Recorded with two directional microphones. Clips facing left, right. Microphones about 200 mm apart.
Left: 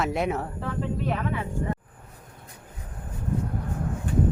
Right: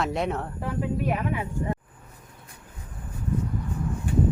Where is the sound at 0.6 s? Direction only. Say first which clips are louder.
Right 3 dB; 15° right (ahead or behind).